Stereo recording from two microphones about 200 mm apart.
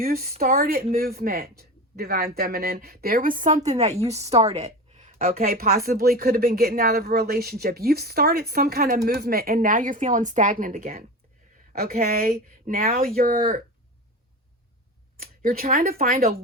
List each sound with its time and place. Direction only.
0.0 s a woman's voice: 45° right (ahead or behind)
5.5 s speech: 45° right (ahead or behind)
15.2 s speech: 45° right (ahead or behind)